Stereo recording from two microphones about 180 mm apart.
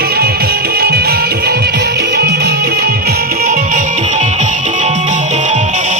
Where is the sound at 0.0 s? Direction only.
60° right (ahead or behind).